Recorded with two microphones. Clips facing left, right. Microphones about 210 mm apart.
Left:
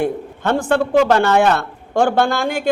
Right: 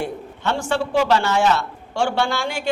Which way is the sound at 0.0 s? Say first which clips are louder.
Left 6 dB; 55° left (ahead or behind).